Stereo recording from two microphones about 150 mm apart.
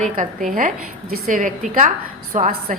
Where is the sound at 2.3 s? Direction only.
65° right (ahead or behind).